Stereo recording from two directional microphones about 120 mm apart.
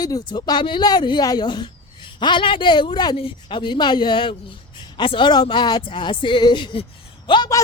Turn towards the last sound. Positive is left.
turn(degrees=45)  # may be behind; listen again after turning